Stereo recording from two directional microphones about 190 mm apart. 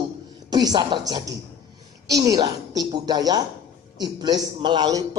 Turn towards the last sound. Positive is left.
turn(degrees=-25)  # may be behind; listen again after turning